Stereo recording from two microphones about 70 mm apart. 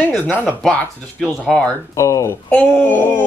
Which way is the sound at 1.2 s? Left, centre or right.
Centre.